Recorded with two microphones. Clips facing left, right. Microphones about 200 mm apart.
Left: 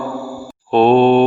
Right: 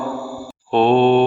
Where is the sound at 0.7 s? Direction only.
45° left (ahead or behind).